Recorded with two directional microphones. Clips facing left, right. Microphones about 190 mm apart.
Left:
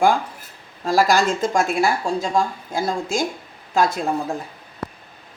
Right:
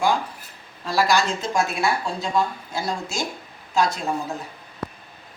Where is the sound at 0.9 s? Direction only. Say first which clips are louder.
Left 4 dB; 45° left (ahead or behind).